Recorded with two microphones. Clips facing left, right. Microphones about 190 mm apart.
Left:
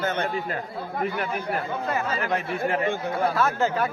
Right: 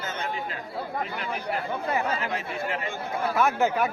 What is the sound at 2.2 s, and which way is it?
Speech, 55° left (ahead or behind).